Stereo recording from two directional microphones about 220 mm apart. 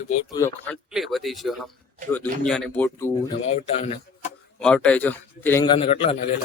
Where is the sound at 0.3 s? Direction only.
10° left (ahead or behind).